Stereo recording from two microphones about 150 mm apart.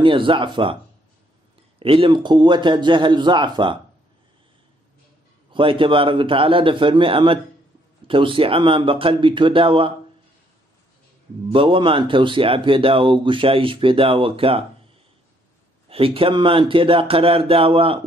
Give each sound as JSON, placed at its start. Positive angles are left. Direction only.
{"t": 0.0, "sound": "speech", "side_deg": -35}
{"t": 1.8, "sound": "speech", "side_deg": -35}
{"t": 5.5, "sound": "speech", "side_deg": -35}
{"t": 11.5, "sound": "speech", "side_deg": -35}
{"t": 15.9, "sound": "speech", "side_deg": -40}